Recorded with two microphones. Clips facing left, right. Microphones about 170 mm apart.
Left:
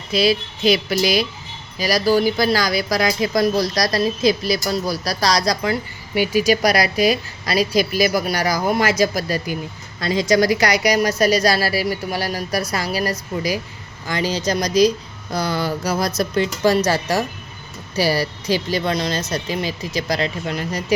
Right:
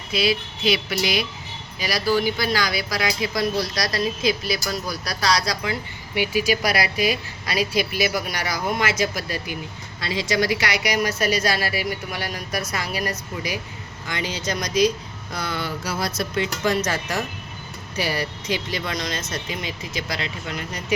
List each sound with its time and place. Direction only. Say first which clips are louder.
0.1 s speech: left 5 dB; 40° left (ahead or behind)